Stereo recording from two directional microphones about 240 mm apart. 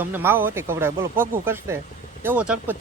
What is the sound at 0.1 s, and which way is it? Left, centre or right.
Speech, centre.